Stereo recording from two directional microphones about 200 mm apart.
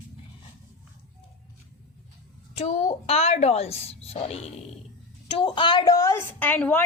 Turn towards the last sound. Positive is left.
turn(degrees=10)  # may be behind; listen again after turning